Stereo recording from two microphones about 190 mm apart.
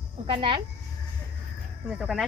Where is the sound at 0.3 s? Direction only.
25° right (ahead or behind).